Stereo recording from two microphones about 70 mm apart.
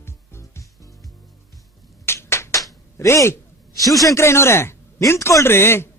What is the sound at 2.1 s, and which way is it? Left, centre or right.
Finger snapping, left.